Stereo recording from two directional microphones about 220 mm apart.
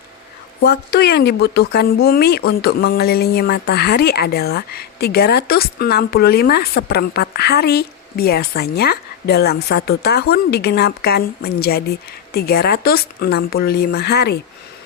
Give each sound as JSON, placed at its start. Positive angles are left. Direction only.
{"t": 0.6, "sound": "a woman's voice", "side_deg": 45}